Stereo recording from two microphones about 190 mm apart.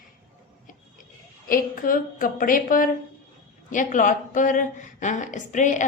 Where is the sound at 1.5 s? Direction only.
45° left (ahead or behind).